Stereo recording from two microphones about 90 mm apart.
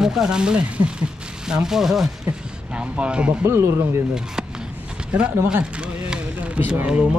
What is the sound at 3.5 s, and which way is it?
Speech, 30° right (ahead or behind).